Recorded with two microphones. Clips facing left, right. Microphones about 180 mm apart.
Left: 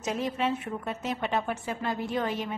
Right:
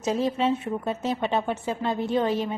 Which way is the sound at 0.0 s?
30° right (ahead or behind).